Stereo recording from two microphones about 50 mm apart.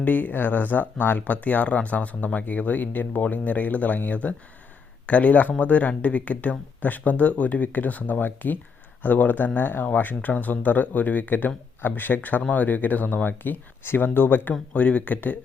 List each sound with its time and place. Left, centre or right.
0.0 s speech: left
14.7 s speech: left